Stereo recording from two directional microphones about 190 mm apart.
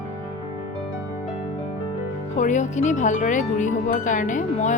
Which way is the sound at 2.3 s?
40° left (ahead or behind).